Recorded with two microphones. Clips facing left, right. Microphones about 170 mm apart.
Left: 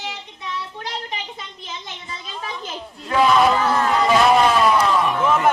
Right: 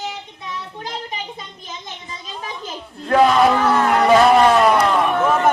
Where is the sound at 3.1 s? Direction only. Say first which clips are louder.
Right 2 dB; 55° right (ahead or behind).